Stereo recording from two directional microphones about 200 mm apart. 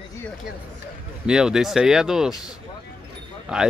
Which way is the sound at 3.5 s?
5° right (ahead or behind).